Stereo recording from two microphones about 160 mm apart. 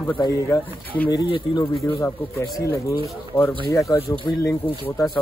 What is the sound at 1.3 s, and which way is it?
Speech, 25° left (ahead or behind).